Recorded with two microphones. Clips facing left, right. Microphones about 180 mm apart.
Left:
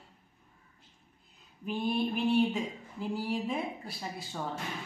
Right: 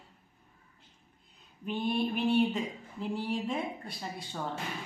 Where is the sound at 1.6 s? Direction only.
Centre (ahead or behind).